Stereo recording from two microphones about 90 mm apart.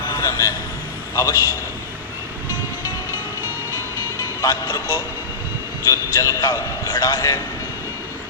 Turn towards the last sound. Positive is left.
turn(degrees=45)  # may be behind; listen again after turning